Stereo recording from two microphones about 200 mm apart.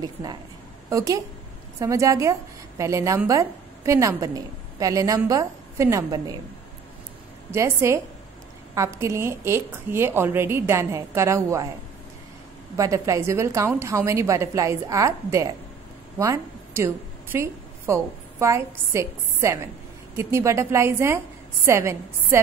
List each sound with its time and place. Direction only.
0.0 s a woman's voice: 20° right (ahead or behind)
7.5 s a woman's voice: 15° right (ahead or behind)
12.7 s a woman's voice: 15° right (ahead or behind)